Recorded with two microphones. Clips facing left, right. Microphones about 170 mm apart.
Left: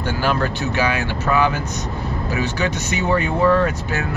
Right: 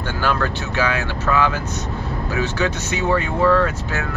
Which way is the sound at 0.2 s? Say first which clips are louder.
Even; 15° left (ahead or behind).